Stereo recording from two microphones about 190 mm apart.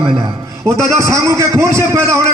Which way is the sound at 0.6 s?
15° right (ahead or behind).